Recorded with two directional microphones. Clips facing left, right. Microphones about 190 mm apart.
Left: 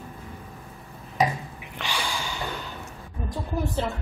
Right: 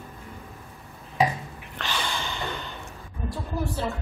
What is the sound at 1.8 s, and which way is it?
Gasp, 10° left (ahead or behind).